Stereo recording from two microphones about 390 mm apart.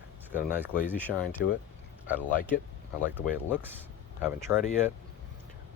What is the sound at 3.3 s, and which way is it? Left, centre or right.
Speech, centre.